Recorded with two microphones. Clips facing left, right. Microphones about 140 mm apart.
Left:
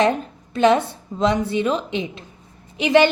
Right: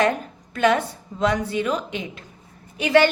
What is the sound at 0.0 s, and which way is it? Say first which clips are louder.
A woman's voice: left 2 dB; 20° left (ahead or behind).